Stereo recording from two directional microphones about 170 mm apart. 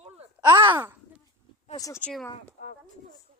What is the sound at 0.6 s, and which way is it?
Speech, 30° right (ahead or behind).